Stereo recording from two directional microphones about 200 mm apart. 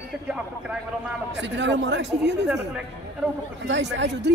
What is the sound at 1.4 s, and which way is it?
Speech, 60° right (ahead or behind).